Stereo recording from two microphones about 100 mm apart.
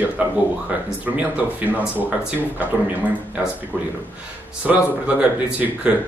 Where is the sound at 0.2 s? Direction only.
10° right (ahead or behind).